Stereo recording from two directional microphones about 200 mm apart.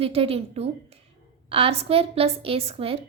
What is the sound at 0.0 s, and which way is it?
A woman's voice, 30° right (ahead or behind).